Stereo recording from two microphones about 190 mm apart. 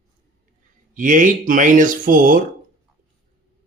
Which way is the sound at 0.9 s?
45° right (ahead or behind).